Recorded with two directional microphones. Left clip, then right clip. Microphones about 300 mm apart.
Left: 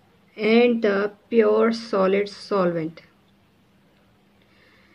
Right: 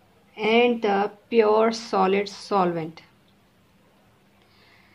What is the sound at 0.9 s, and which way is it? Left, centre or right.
Speech, right.